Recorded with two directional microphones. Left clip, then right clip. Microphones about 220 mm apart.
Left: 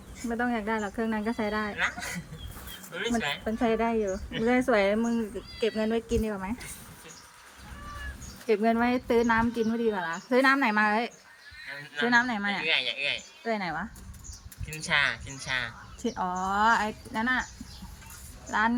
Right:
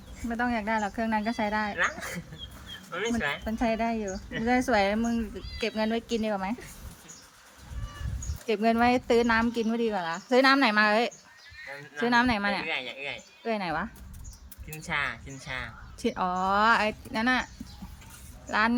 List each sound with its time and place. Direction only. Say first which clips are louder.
0.2 s speech: even; 25° right (ahead or behind)
8.4 s speech: right 1 dB; 25° right (ahead or behind)
12.6 s speech: left 6 dB; 15° right (ahead or behind)
13.4 s speech: right 3 dB; 25° right (ahead or behind)
14.7 s speech: left 5 dB; 15° right (ahead or behind)
16.0 s speech: right 2 dB; 25° right (ahead or behind)
18.5 s speech: right 1 dB; 25° right (ahead or behind)